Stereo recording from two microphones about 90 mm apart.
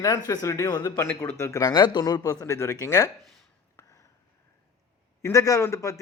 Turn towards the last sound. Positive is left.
turn(degrees=35)  # may be behind; listen again after turning